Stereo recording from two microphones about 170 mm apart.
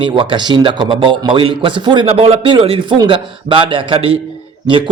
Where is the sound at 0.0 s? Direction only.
30° right (ahead or behind).